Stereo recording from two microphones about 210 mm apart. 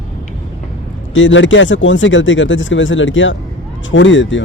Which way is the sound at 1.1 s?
65° left (ahead or behind).